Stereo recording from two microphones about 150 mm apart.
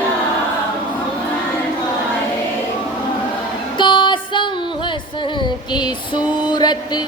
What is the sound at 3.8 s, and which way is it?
Music, 30° left (ahead or behind).